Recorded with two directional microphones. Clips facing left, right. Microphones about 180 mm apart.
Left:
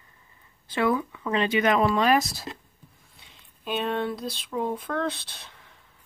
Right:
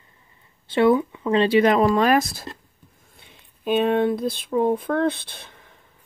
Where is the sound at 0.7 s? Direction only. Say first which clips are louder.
Right 7 dB; 25° right (ahead or behind); by 5.7 s 55° right (ahead or behind).